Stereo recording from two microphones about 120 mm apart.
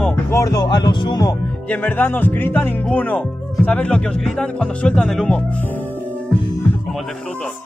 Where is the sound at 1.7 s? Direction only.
15° left (ahead or behind).